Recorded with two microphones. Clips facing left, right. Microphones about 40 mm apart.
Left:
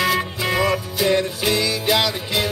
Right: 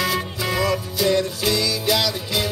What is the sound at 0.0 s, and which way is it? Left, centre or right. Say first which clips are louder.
Music: left 3 dB; centre.